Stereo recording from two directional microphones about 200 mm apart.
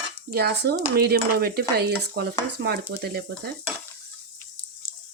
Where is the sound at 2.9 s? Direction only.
55° right (ahead or behind).